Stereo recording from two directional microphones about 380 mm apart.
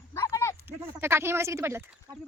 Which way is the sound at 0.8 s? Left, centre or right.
Centre.